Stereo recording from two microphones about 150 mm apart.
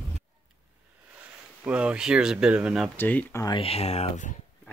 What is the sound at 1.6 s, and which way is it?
Speech, 10° right (ahead or behind).